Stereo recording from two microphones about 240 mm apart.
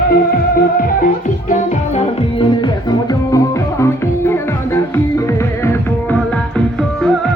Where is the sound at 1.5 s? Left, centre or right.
Left; by 7.1 s centre.